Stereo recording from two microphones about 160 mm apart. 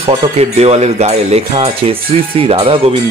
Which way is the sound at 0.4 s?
40° right (ahead or behind).